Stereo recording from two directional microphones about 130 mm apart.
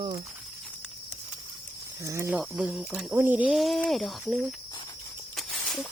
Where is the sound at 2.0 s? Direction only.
20° right (ahead or behind).